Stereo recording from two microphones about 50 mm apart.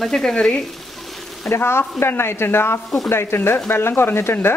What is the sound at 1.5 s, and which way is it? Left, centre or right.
Speech, left.